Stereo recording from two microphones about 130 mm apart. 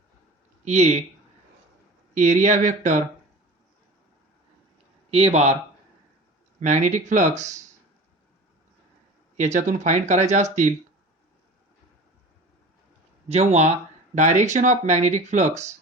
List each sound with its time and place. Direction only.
0.6 s speech: 60° right (ahead or behind)
2.1 s speech: 70° right (ahead or behind)
5.1 s speech: 55° right (ahead or behind)
6.6 s speech: 70° right (ahead or behind)
9.4 s speech: 65° right (ahead or behind)
13.2 s speech: 55° right (ahead or behind)